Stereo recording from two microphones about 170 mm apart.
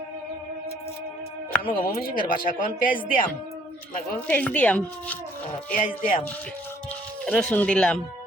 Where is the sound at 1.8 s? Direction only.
60° left (ahead or behind).